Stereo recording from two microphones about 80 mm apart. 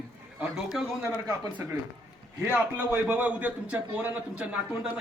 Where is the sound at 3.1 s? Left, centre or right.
Right.